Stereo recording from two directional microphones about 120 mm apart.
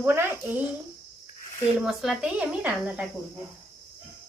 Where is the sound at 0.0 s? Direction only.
20° right (ahead or behind).